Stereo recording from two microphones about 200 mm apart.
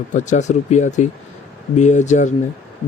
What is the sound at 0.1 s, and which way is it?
Speech, 35° left (ahead or behind).